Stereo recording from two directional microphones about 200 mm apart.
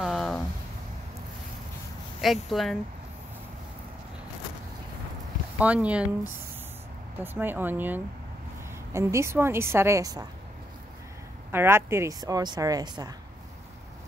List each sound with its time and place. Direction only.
0.0 s a sound: centre (ahead or behind)
2.5 s speech: centre (ahead or behind)
5.6 s a woman's voice: 5° right (ahead or behind)
7.2 s a woman's voice: 10° right (ahead or behind)
11.5 s a woman's voice: 10° right (ahead or behind)